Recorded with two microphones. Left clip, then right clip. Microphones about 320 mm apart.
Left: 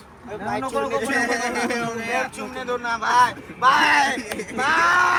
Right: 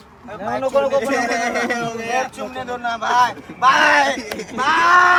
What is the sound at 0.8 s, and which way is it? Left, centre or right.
Speech, right.